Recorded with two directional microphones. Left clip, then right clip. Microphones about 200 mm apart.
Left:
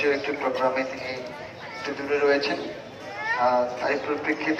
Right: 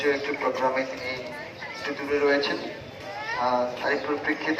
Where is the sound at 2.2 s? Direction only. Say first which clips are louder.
Left 1 dB; 25° left (ahead or behind).